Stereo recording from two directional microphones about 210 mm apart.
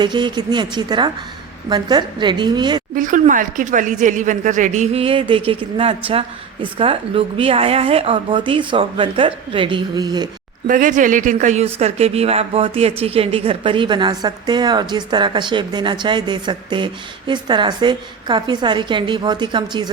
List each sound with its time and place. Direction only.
0.0 s speech: 20° right (ahead or behind)
2.9 s speech: 40° right (ahead or behind); by 10.2 s 20° right (ahead or behind)
10.7 s speech: 40° right (ahead or behind); by 19.9 s 20° right (ahead or behind)